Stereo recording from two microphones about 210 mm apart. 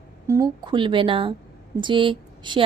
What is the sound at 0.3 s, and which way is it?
A woman's voice, 15° right (ahead or behind).